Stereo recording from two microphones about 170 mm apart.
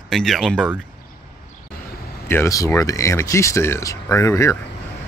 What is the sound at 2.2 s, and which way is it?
Speech, 15° left (ahead or behind).